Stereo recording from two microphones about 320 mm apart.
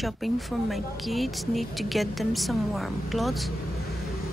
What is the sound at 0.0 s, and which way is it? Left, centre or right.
Speech, centre.